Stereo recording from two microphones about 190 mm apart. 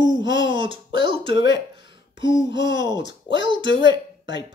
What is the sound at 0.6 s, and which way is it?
Speech, 25° right (ahead or behind).